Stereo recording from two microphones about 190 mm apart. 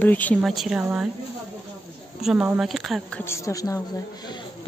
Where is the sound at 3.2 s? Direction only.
15° left (ahead or behind).